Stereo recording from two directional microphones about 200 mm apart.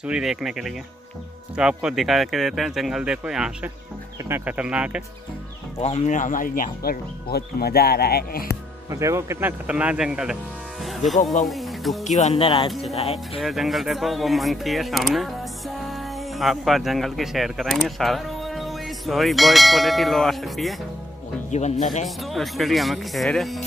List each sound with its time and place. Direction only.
0.0 s speech: 5° right (ahead or behind)
5.8 s speech: 30° left (ahead or behind); by 8.5 s 50° left (ahead or behind)
8.9 s speech: 15° right (ahead or behind)
10.8 s music: centre (ahead or behind)
12.0 s speech: 35° left (ahead or behind)
12.4 s speech: 20° left (ahead or behind)
13.4 s speech: centre (ahead or behind)
21.5 s speech: 35° left (ahead or behind)
22.0 s speech: centre (ahead or behind)